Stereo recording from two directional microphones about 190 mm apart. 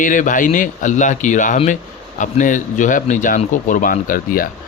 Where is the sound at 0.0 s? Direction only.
45° left (ahead or behind).